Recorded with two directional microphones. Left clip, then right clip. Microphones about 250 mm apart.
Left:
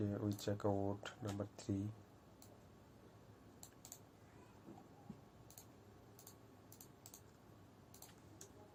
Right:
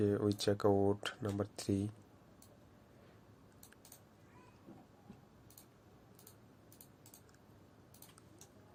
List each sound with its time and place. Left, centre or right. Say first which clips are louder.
0.0 s speech: right 10 dB; right